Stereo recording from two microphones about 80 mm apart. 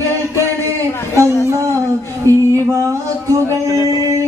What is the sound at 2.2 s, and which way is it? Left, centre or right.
Music, right.